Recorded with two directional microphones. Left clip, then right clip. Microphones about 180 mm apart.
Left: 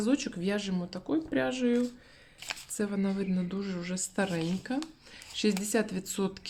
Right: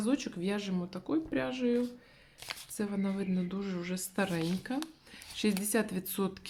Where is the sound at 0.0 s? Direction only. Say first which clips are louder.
Left 3 dB; 10° left (ahead or behind).